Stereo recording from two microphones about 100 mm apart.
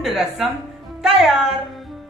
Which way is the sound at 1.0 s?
5° right (ahead or behind).